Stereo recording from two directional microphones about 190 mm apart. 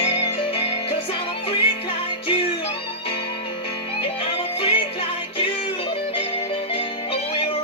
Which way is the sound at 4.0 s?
30° left (ahead or behind).